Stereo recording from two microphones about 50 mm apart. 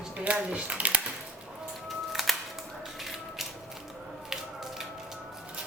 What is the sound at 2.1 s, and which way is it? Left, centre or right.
Music, centre.